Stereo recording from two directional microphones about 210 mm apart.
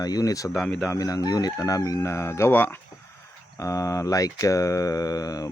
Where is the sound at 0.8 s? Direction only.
15° left (ahead or behind).